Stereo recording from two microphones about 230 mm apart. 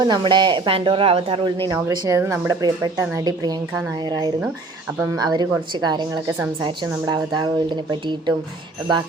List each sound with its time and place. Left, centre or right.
0.0 s a woman's voice: centre
4.9 s a woman's voice: centre